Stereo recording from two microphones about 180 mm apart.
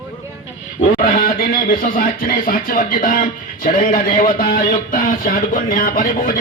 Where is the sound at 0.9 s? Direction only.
50° left (ahead or behind).